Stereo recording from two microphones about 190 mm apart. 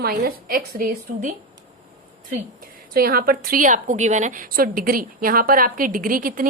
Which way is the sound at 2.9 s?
50° right (ahead or behind).